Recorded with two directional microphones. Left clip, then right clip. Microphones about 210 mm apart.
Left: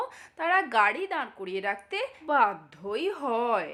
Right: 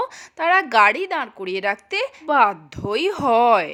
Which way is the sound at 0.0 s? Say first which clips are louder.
Right 9 dB; 35° right (ahead or behind).